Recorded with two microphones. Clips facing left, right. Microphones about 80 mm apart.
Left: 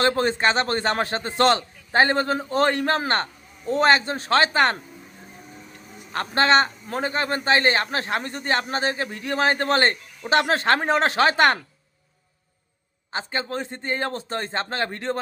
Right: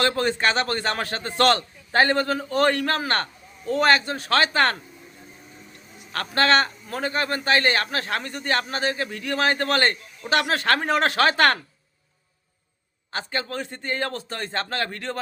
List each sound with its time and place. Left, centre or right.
0.0 s a man's voice: left
6.1 s a man's voice: left
13.1 s a man's voice: left